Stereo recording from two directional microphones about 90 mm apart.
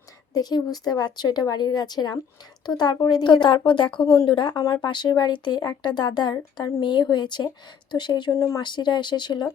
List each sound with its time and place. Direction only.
0.3 s speech: 45° left (ahead or behind)
8.3 s speech: 35° left (ahead or behind)
8.6 s speech: 55° left (ahead or behind)